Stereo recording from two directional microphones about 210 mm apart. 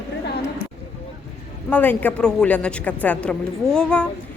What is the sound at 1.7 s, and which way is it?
A woman's voice, 10° left (ahead or behind).